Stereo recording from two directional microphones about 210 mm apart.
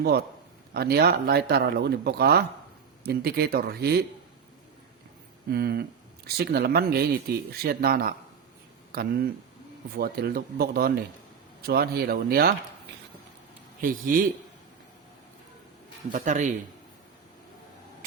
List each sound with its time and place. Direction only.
0.0 s speech: 50° right (ahead or behind)
5.5 s speech: 50° right (ahead or behind)
13.8 s a man's voice: 40° right (ahead or behind)
16.1 s a man's voice: 35° right (ahead or behind)